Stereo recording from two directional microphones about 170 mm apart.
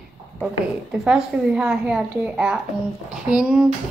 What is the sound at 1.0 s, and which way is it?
Speech, 5° right (ahead or behind).